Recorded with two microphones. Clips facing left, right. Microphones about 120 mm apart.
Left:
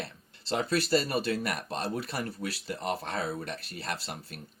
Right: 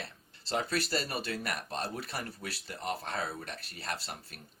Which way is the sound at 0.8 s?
40° left (ahead or behind).